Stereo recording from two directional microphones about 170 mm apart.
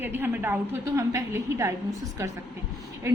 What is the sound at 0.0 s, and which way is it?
A woman's voice, 15° right (ahead or behind).